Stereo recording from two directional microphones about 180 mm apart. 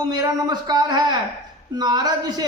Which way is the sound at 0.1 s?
20° right (ahead or behind).